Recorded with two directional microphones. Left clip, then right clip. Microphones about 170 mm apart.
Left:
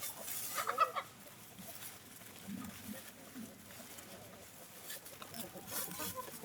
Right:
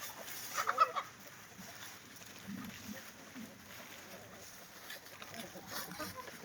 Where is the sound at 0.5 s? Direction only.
5° left (ahead or behind).